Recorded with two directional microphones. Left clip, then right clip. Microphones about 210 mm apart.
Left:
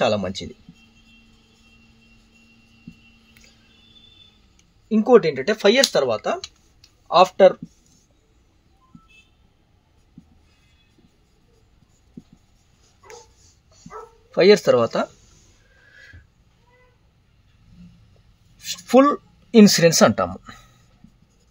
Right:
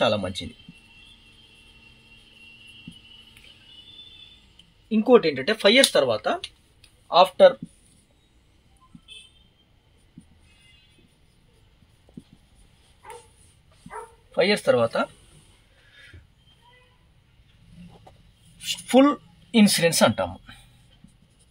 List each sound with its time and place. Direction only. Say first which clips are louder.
4.8 s speech: left 3 dB; 55° left (ahead or behind)
6.8 s a sound: left 2 dB; 55° left (ahead or behind)
14.3 s speech: left 6 dB; 50° left (ahead or behind)
15.9 s horse: left 3 dB; 50° left (ahead or behind)
18.6 s speech: left 3 dB; 50° left (ahead or behind)